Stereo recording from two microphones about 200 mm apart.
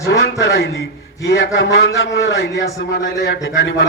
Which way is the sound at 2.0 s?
60° left (ahead or behind).